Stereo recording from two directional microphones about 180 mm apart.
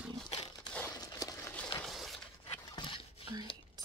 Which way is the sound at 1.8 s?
Centre (ahead or behind).